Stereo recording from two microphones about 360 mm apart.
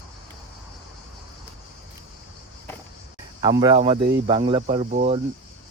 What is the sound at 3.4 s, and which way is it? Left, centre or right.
Speech, centre.